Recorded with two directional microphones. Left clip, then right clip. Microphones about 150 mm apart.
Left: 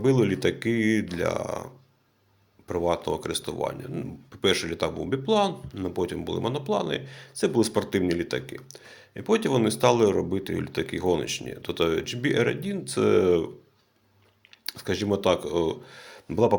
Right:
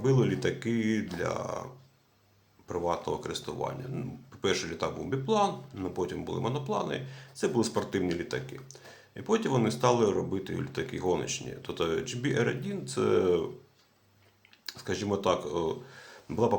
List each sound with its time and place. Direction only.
0.0 s speech: 35° left (ahead or behind)
2.6 s speech: 35° left (ahead or behind)
14.7 s speech: 35° left (ahead or behind)